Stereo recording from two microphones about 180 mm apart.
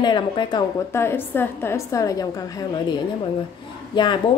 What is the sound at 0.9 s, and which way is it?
A woman's voice, 10° left (ahead or behind).